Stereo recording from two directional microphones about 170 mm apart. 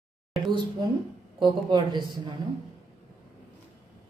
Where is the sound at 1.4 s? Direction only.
25° right (ahead or behind).